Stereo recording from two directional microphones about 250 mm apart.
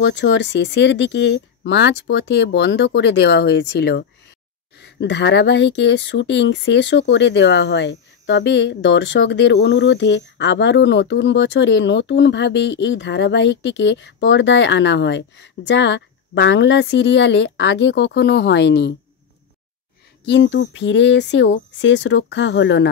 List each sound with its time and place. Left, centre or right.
0.0 s speech: left
20.2 s speech: left